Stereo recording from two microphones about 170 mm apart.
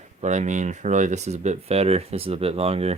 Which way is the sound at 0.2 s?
45° right (ahead or behind).